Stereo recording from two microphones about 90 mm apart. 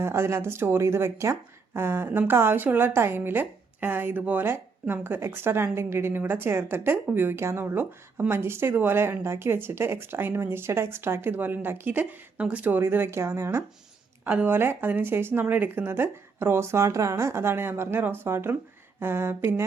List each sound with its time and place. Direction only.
0.0 s speech: 30° right (ahead or behind)